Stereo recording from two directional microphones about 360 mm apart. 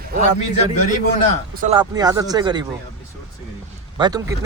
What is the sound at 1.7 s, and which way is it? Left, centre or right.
Speech, centre.